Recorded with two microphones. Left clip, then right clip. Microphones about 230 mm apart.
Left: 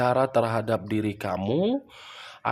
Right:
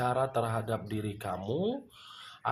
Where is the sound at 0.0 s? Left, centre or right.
Left.